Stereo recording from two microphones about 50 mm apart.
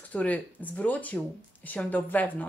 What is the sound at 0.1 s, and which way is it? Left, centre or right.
Speech, left.